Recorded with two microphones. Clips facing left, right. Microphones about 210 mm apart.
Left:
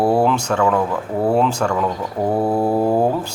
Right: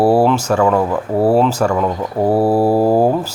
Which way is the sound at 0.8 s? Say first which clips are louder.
Right 4 dB; 30° right (ahead or behind).